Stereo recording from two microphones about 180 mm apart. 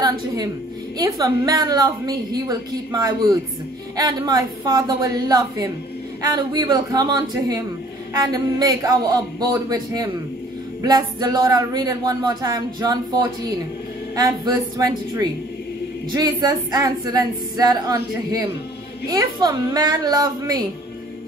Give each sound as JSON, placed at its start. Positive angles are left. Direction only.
{"t": 0.9, "sound": "speech", "side_deg": -20}